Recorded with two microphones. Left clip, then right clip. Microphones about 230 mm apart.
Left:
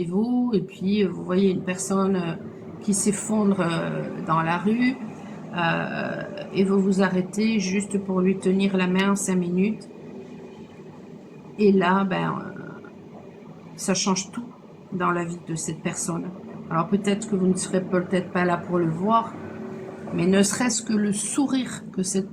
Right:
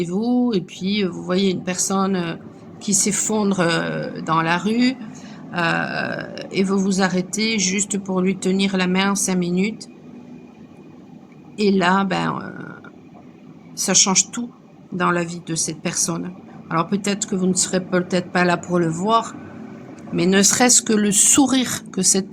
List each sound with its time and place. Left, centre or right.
0.0 s a woman's voice: right
11.5 s a woman's voice: right
13.7 s a woman's voice: right